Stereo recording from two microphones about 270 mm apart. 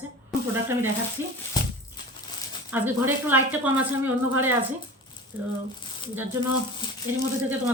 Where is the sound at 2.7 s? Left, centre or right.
Centre.